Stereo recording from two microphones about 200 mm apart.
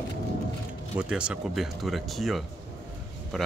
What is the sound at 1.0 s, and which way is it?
Speech, 5° right (ahead or behind).